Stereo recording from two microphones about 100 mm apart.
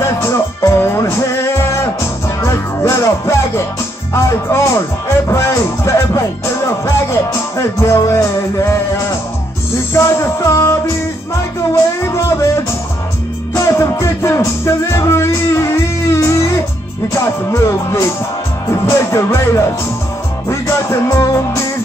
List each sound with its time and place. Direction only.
0.0 s music: 30° left (ahead or behind)
9.9 s music: 30° left (ahead or behind)
13.6 s music: 30° left (ahead or behind)